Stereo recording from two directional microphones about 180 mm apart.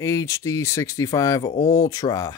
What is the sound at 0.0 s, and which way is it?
Speech, 15° left (ahead or behind).